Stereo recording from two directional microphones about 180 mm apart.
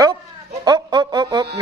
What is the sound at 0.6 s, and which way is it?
Speech, 25° right (ahead or behind).